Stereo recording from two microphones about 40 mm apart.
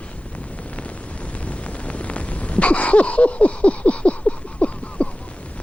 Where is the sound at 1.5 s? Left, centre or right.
Left.